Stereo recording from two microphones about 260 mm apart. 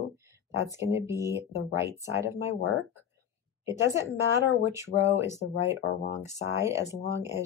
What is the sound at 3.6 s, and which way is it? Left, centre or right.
Speech, centre.